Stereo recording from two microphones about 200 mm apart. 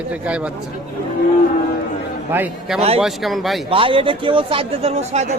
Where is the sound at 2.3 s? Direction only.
5° right (ahead or behind).